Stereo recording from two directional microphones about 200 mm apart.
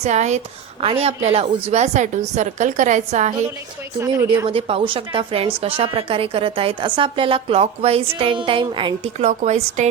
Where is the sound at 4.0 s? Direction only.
15° right (ahead or behind).